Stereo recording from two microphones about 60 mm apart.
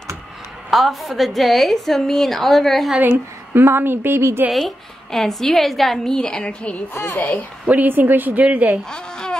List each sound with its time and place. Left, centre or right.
0.7 s a woman's voice: centre
3.0 s a woman's voice: right
4.5 s a woman's voice: centre
6.1 s a woman's voice: centre
6.9 s a child's voice: left
7.2 s a woman's voice: left
7.6 s a woman's voice: right
8.9 s a sound: centre